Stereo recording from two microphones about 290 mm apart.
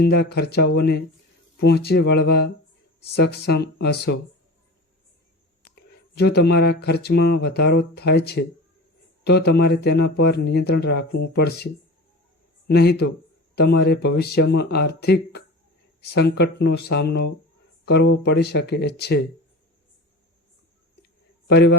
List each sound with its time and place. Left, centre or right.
0.0 s speech: left
6.1 s speech: left
21.5 s speech: left